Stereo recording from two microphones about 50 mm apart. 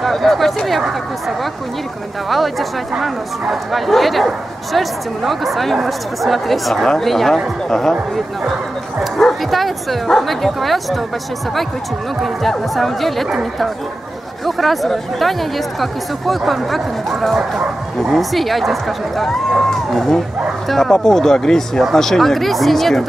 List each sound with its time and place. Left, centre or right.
0.0 s speech: centre
2.2 s speech: centre
9.0 s speech: centre
12.2 s speech: centre
17.4 s speech: centre
18.1 s speech: centre